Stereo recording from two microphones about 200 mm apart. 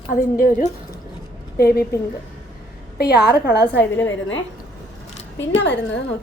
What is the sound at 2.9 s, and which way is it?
Speech, 55° left (ahead or behind).